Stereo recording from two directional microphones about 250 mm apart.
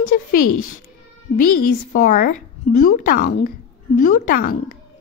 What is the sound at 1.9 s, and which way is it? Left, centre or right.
A woman's voice, left.